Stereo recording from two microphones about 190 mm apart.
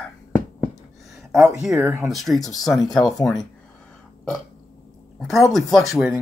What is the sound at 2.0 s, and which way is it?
Speech, centre (ahead or behind).